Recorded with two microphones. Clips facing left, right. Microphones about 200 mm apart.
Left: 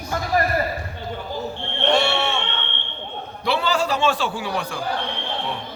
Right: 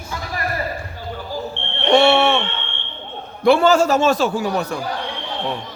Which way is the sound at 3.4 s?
50° right (ahead or behind).